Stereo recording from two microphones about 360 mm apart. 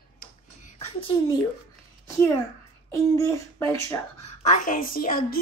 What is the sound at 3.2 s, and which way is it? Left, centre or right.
Speech, centre.